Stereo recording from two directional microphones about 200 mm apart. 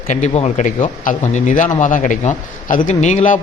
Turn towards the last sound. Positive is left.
turn(degrees=40)  # may be behind; listen again after turning